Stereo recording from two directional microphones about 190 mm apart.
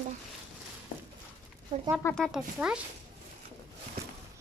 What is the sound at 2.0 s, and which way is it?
Speech, 5° left (ahead or behind).